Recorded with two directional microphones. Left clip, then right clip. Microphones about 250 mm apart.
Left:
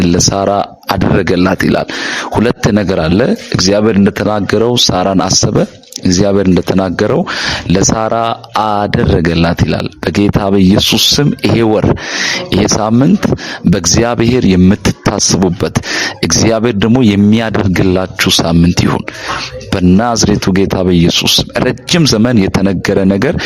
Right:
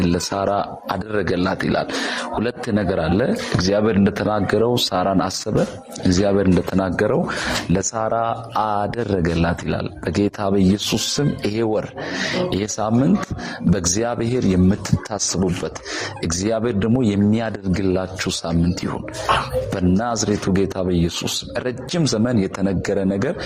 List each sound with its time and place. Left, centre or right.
0.0 s a man's voice: left